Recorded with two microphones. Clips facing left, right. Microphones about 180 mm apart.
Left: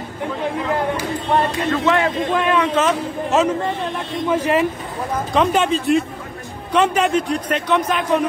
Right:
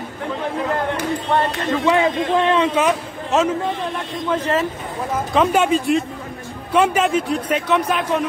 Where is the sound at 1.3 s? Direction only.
10° left (ahead or behind).